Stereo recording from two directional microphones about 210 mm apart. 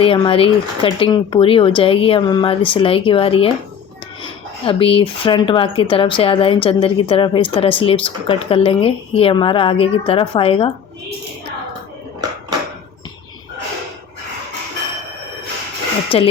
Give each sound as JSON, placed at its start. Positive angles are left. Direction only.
{"t": 0.0, "sound": "speech", "side_deg": 25}
{"t": 16.0, "sound": "speech", "side_deg": 25}